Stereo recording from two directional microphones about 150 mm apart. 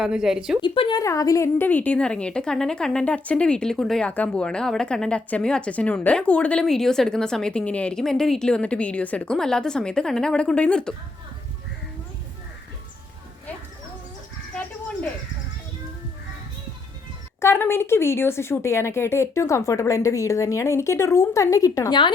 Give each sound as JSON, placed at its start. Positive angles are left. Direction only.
{"t": 0.0, "sound": "a woman's voice", "side_deg": -5}
{"t": 0.6, "sound": "a woman's voice", "side_deg": 35}
{"t": 17.4, "sound": "a woman's voice", "side_deg": 15}